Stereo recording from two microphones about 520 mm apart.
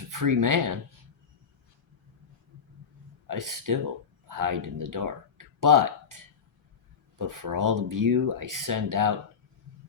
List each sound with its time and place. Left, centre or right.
0.1 s speech: right
3.2 s speech: right